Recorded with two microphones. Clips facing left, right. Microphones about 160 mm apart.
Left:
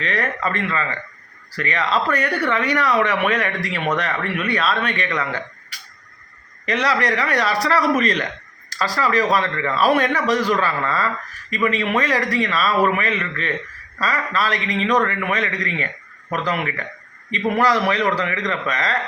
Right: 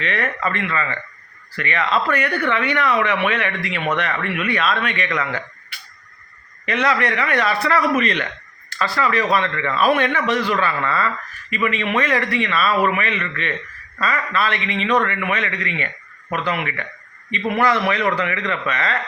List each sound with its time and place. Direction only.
0.0 s a man's voice: 35° left (ahead or behind)